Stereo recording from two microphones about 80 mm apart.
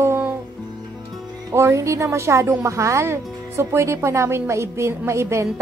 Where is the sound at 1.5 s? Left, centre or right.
Right.